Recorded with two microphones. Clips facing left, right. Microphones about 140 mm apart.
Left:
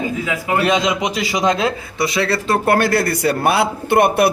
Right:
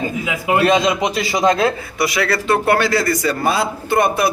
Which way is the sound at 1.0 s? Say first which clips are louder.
Right 2 dB; 15° left (ahead or behind).